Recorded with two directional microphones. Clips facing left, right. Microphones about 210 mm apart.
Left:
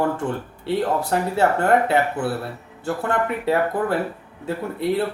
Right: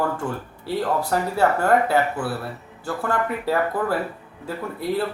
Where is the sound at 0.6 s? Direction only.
25° left (ahead or behind).